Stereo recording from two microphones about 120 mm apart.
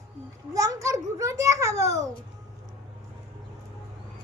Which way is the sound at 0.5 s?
30° right (ahead or behind).